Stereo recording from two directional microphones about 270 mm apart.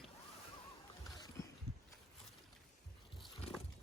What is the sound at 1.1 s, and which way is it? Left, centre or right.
Boat, centre.